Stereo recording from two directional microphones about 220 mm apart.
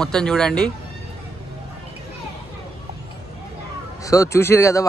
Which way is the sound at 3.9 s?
15° left (ahead or behind).